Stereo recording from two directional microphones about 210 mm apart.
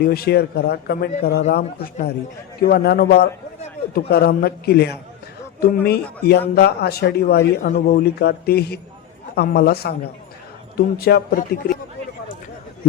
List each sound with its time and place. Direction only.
0.0 s a man's voice: 45° left (ahead or behind)
1.5 s a man's voice: 40° left (ahead or behind)